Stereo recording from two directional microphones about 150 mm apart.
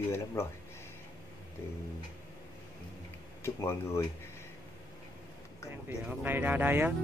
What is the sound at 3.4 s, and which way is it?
Speech, 15° left (ahead or behind).